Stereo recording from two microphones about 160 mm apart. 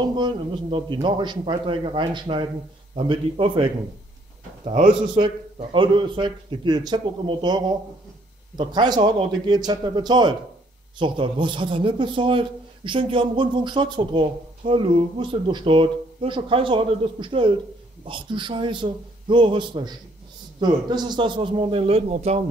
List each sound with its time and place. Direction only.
0.1 s a man's voice: 30° right (ahead or behind)